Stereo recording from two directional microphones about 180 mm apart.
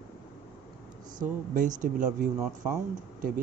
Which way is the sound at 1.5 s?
45° right (ahead or behind).